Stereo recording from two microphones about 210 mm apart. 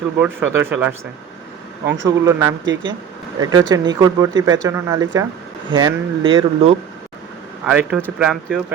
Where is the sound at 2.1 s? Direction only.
15° right (ahead or behind).